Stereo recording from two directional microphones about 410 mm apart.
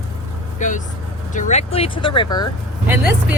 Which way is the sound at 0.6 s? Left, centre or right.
Centre.